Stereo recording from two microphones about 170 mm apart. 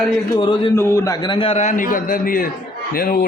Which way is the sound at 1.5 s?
45° left (ahead or behind).